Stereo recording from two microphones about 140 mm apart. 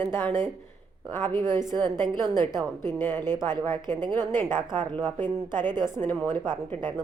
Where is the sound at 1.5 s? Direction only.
30° right (ahead or behind).